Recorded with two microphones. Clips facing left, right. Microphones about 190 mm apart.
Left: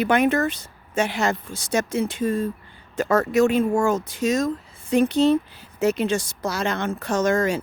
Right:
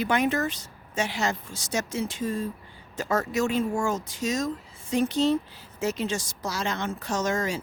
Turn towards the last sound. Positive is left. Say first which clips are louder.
# left 6 dB
turn(degrees=55)  # may be behind; listen again after turning